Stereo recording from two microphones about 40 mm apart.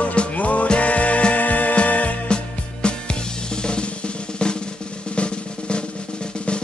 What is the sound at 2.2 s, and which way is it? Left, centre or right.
Music, left.